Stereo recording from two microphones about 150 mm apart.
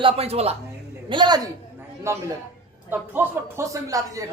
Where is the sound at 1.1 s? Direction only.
30° right (ahead or behind).